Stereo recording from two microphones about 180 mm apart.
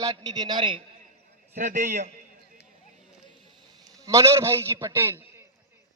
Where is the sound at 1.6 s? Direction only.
45° right (ahead or behind).